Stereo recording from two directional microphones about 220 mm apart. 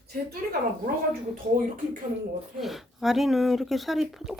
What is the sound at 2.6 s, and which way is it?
Speech, centre (ahead or behind).